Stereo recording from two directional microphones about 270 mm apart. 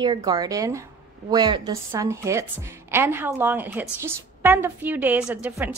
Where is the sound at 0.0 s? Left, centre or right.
Centre.